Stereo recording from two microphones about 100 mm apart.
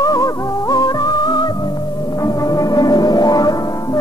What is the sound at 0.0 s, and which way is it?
Music, 35° left (ahead or behind).